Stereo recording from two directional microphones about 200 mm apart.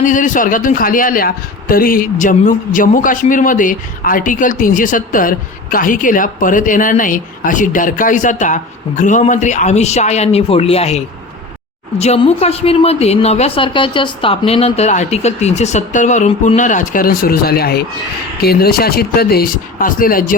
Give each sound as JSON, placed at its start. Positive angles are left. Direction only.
{"t": 0.0, "sound": "a woman's voice", "side_deg": 40}